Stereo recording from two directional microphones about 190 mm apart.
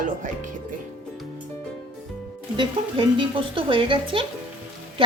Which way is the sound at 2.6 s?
25° right (ahead or behind).